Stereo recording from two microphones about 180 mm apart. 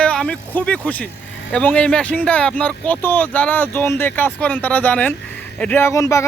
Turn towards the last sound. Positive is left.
turn(degrees=15)  # may be behind; listen again after turning